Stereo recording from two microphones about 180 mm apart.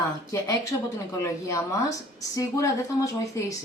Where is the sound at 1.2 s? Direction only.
15° left (ahead or behind).